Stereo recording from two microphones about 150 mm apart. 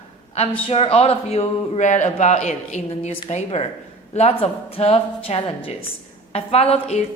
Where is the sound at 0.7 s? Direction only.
40° left (ahead or behind).